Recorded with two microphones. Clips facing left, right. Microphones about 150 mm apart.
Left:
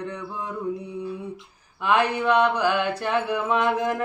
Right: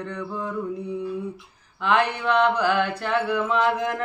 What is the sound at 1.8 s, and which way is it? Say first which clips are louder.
Mantra: left 1 dB; 10° left (ahead or behind).